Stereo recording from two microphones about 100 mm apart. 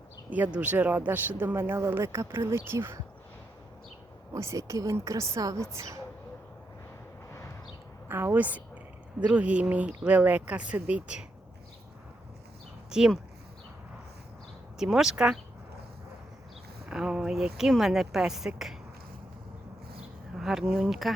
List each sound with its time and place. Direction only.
0.3 s speech: 15° right (ahead or behind)
4.4 s a woman's voice: 30° right (ahead or behind)
8.0 s a woman's voice: 20° right (ahead or behind)
12.9 s speech: 5° right (ahead or behind)
14.8 s a woman's voice: 5° right (ahead or behind)
16.9 s a woman's voice: 5° right (ahead or behind)
20.0 s bee: 5° right (ahead or behind)
20.7 s a woman's voice: centre (ahead or behind)